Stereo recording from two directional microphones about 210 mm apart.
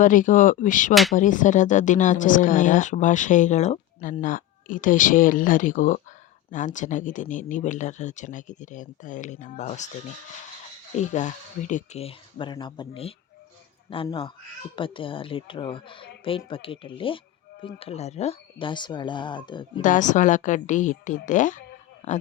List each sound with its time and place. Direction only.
0.0 s speech: 40° left (ahead or behind)
10.9 s speech: 35° left (ahead or behind)
19.8 s speech: 35° left (ahead or behind)